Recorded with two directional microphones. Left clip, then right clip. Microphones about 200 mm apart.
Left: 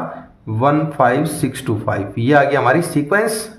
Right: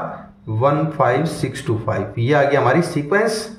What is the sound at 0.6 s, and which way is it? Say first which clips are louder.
A man's voice: left 2 dB; 40° left (ahead or behind).